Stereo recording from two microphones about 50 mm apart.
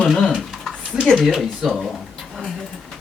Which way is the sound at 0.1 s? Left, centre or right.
Centre.